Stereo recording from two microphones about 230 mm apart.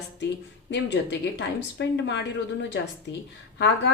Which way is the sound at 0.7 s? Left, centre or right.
Left.